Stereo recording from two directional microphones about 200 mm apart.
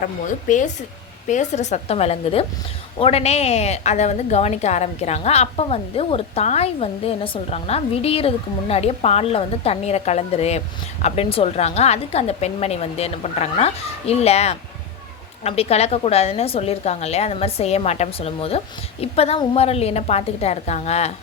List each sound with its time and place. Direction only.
0.0 s a woman's voice: 40° left (ahead or behind)